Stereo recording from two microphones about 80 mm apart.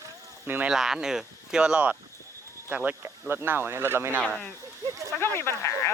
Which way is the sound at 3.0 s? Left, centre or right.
Right.